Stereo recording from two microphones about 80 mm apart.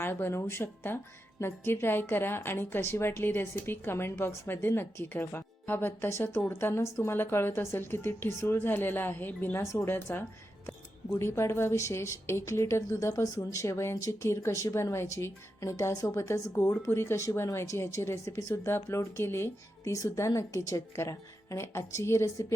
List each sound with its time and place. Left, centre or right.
0.0 s a woman's voice: left